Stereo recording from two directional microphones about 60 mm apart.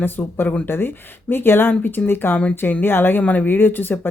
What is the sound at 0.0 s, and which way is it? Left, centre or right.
Speech, left.